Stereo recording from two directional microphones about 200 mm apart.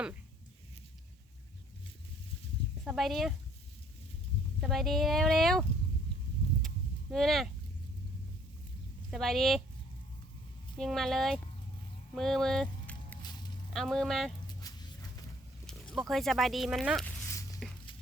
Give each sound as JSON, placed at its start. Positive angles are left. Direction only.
{"t": 2.8, "sound": "speech", "side_deg": 0}
{"t": 4.6, "sound": "speech", "side_deg": 0}
{"t": 7.1, "sound": "speech", "side_deg": 0}
{"t": 9.0, "sound": "speech", "side_deg": 0}
{"t": 10.8, "sound": "speech", "side_deg": 0}
{"t": 14.4, "sound": "dog", "side_deg": 20}
{"t": 15.6, "sound": "speech", "side_deg": 0}
{"t": 17.6, "sound": "music", "side_deg": 0}